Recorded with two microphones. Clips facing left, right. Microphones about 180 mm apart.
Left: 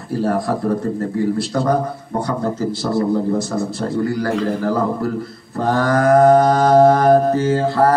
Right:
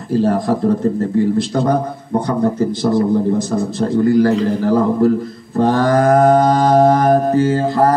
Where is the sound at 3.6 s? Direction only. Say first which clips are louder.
Right 4 dB; 20° right (ahead or behind).